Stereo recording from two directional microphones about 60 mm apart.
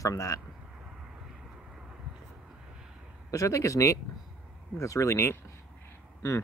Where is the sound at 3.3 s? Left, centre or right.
Left.